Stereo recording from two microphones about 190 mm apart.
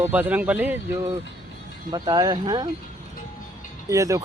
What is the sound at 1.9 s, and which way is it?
Speech, 20° right (ahead or behind).